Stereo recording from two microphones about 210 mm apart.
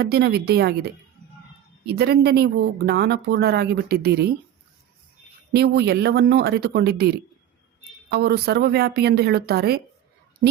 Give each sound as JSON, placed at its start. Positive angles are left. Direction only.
{"t": 0.0, "sound": "speech", "side_deg": -50}
{"t": 1.9, "sound": "speech", "side_deg": -50}
{"t": 5.5, "sound": "speech", "side_deg": -50}
{"t": 8.1, "sound": "speech", "side_deg": -50}